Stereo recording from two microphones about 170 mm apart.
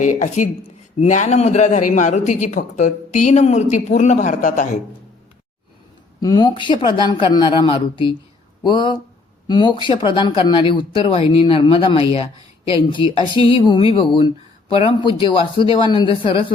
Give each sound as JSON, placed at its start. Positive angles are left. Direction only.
{"t": 0.0, "sound": "a man's voice", "side_deg": 45}
{"t": 6.1, "sound": "a man's voice", "side_deg": 20}